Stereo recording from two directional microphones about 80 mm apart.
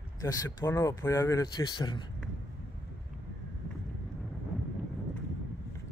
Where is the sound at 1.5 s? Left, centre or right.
Left.